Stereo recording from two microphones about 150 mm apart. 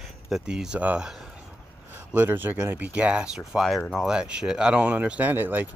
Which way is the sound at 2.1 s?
15° right (ahead or behind).